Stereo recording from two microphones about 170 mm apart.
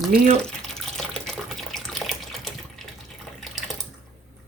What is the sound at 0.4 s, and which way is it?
Water, 5° left (ahead or behind).